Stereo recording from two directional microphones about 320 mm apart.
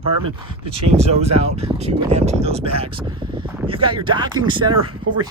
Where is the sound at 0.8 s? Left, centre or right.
Centre.